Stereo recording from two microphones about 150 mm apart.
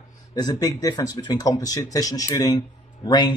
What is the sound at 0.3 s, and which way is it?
Speech, 25° left (ahead or behind).